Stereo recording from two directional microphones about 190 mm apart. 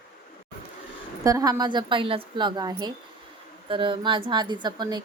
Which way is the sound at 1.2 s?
15° right (ahead or behind).